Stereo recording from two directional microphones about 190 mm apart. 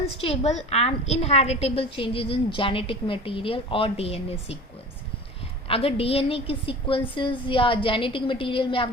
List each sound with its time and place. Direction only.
0.0 s a woman's voice: 30° left (ahead or behind)
5.6 s a woman's voice: 30° left (ahead or behind)